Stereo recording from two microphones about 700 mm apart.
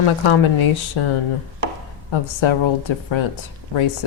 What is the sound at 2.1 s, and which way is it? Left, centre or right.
Speech, left.